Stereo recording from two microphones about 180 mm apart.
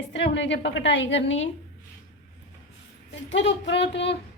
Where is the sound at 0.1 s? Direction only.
75° left (ahead or behind).